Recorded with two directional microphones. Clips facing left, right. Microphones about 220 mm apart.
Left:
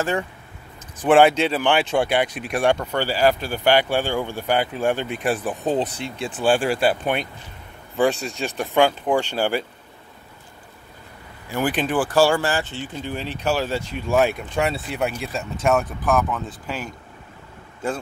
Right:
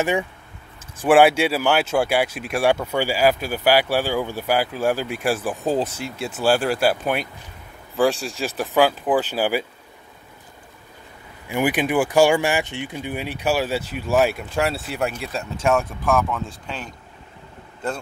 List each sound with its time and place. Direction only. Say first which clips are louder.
0.0 s speech: right 2 dB; 15° right (ahead or behind)
11.4 s speech: right 2 dB; 10° right (ahead or behind); by 16.9 s 5° left (ahead or behind)